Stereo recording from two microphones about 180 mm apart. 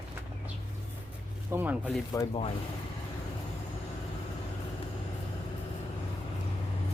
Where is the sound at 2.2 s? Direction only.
20° left (ahead or behind).